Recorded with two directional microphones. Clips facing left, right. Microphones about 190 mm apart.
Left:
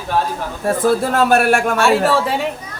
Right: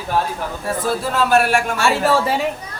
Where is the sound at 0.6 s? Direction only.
50° left (ahead or behind).